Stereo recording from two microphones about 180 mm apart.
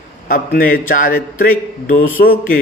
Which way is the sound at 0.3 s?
50° left (ahead or behind).